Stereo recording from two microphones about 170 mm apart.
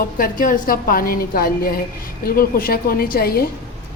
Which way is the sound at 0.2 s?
50° left (ahead or behind).